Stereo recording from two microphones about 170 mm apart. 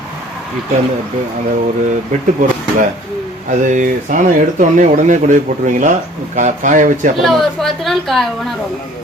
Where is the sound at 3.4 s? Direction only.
50° right (ahead or behind).